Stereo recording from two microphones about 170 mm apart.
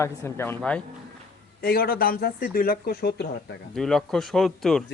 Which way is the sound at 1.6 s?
60° left (ahead or behind).